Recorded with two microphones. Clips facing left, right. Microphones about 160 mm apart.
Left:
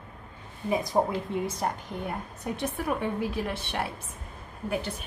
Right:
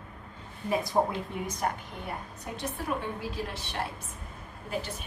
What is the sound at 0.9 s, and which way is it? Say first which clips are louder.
Speech: left 1 dB; 5° left (ahead or behind).